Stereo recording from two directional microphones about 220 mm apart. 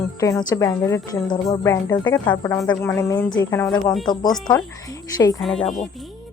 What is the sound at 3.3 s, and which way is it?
Speech, 10° left (ahead or behind).